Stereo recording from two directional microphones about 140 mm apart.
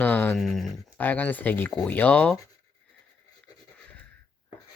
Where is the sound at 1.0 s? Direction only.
15° left (ahead or behind).